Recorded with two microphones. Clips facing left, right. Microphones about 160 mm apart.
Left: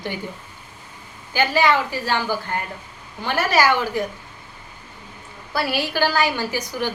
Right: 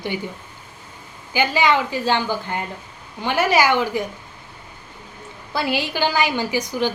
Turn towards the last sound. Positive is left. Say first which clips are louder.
# right 3 dB
turn(degrees=-20)  # may be behind; listen again after turning